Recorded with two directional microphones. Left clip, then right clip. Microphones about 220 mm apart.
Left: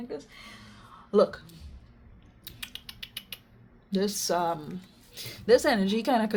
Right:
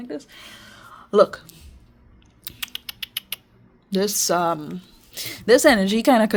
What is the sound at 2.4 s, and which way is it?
Typing, 50° right (ahead or behind).